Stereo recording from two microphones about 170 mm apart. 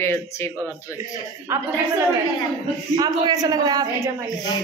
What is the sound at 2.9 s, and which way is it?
A man's voice, 25° right (ahead or behind).